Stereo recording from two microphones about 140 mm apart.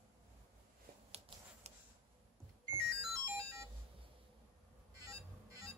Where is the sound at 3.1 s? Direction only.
20° right (ahead or behind).